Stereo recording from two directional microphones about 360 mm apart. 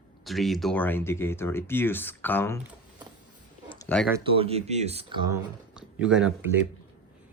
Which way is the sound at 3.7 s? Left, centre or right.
Centre.